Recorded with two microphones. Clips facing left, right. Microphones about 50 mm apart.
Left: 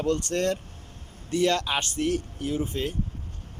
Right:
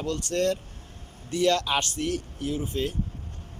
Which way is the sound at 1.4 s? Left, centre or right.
Left.